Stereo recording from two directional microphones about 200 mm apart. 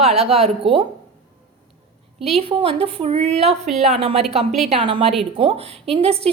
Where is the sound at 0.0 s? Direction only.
30° right (ahead or behind).